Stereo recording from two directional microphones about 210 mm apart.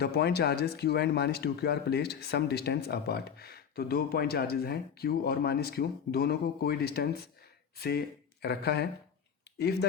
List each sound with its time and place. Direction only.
0.0 s speech: 50° left (ahead or behind)